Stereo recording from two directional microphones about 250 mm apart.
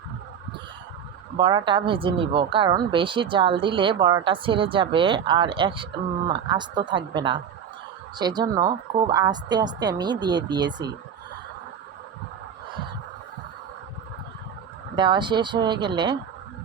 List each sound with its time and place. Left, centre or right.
1.4 s a woman's voice: centre
14.9 s speech: centre